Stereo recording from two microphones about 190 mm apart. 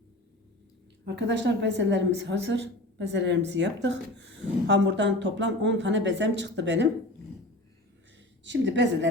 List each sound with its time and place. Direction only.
1.0 s a woman's voice: 65° right (ahead or behind)
8.4 s a woman's voice: 70° right (ahead or behind)